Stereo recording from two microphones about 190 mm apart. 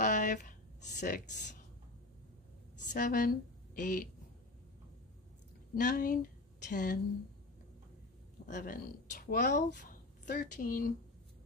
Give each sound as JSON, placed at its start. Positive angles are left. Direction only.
{"t": 0.0, "sound": "a sound", "side_deg": 40}
{"t": 2.9, "sound": "a woman's voice", "side_deg": 45}
{"t": 5.8, "sound": "a woman's voice", "side_deg": 45}
{"t": 8.5, "sound": "a woman's voice", "side_deg": 40}